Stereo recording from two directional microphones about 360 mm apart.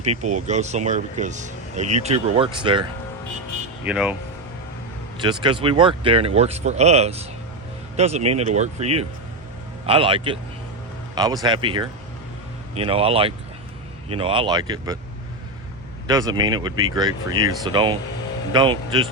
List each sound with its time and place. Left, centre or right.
0.0 s speech: centre
3.8 s speech: centre
5.1 s speech: centre
16.0 s speech: centre